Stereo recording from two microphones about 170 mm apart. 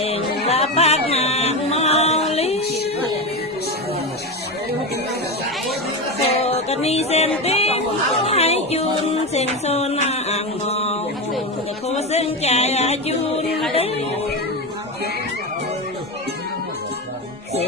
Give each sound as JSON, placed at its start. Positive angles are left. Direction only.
{"t": 0.0, "sound": "music", "side_deg": 35}
{"t": 6.2, "sound": "music", "side_deg": 35}
{"t": 7.4, "sound": "a sound", "side_deg": 35}
{"t": 8.2, "sound": "music", "side_deg": 40}